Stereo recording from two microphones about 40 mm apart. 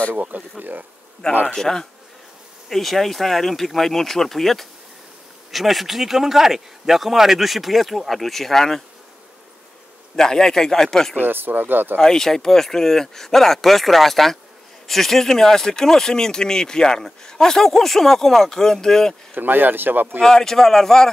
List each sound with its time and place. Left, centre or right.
0.2 s speech: right
1.5 s speech: centre
10.1 s speech: centre
11.1 s speech: right
12.0 s speech: centre
19.3 s speech: right
20.2 s speech: centre